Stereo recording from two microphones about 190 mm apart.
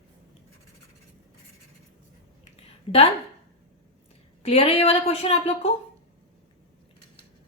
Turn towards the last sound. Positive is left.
turn(degrees=30)  # may be behind; listen again after turning